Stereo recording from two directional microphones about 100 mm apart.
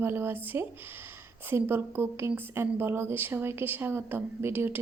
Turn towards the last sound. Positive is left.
turn(degrees=-20)  # may be behind; listen again after turning